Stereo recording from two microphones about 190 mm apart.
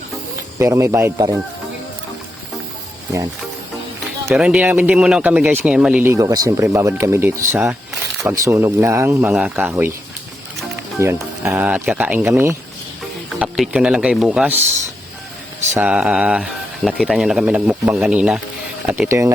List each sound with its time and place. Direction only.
0.6 s speech: 15° right (ahead or behind)
4.3 s speech: 5° right (ahead or behind)
11.0 s speech: 15° right (ahead or behind)
15.7 s speech: 5° right (ahead or behind)